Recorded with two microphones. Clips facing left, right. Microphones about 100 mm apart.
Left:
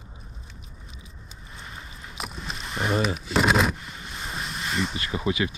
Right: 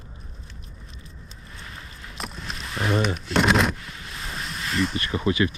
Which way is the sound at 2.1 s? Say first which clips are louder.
Even; centre (ahead or behind).